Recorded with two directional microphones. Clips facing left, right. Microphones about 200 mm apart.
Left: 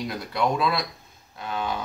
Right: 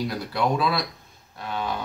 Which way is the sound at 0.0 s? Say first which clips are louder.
Right 1 dB; centre (ahead or behind).